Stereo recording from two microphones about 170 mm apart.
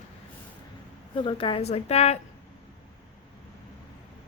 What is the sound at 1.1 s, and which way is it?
Speech, 30° left (ahead or behind).